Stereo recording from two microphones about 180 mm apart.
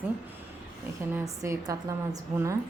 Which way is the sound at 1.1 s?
15° right (ahead or behind).